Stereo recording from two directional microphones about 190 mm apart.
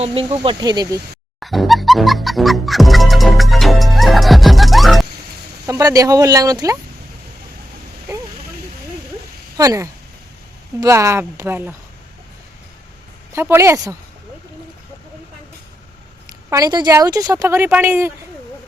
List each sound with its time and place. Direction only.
0.0 s speech: 30° right (ahead or behind)
1.4 s music: centre (ahead or behind)
5.6 s speech: 20° right (ahead or behind)
9.6 s speech: 15° right (ahead or behind)
13.3 s speech: 10° right (ahead or behind)
16.5 s speech: 20° right (ahead or behind)